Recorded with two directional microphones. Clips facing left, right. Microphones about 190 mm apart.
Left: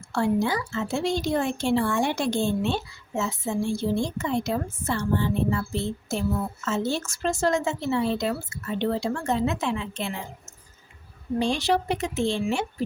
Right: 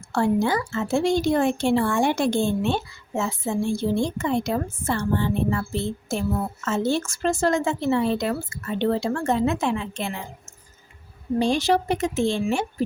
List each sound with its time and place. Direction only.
0.1 s speech: 50° right (ahead or behind)
6.7 s speech: 55° right (ahead or behind)
11.3 s speech: 45° right (ahead or behind)